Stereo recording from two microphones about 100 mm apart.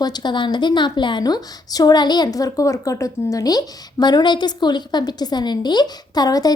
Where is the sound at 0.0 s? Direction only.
45° left (ahead or behind).